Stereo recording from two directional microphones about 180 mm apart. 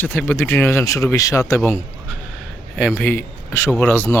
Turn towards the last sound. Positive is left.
turn(degrees=10)  # may be behind; listen again after turning